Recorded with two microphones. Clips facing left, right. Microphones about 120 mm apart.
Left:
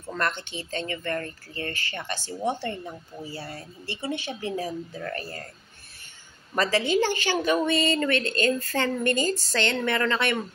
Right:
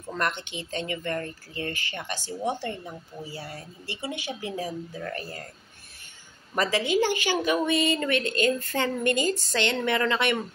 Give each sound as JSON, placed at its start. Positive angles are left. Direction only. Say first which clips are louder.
{"t": 0.0, "sound": "speech", "louder": "even", "side_deg": -15}
{"t": 6.5, "sound": "speech", "louder": "left 1 dB", "side_deg": -15}